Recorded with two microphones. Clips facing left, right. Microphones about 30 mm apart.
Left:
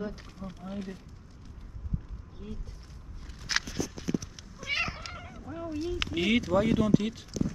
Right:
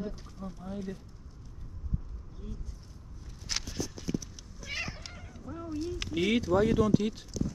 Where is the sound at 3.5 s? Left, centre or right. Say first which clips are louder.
Left 6 dB; left.